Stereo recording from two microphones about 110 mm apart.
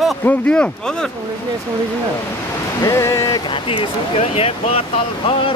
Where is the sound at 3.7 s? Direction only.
65° left (ahead or behind).